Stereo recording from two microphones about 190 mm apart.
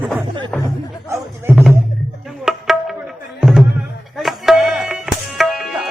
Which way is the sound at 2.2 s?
Centre (ahead or behind).